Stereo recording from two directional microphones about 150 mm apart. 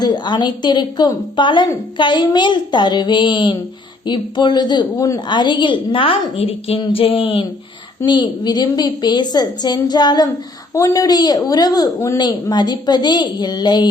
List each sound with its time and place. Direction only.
0.0 s a woman's voice: 30° left (ahead or behind)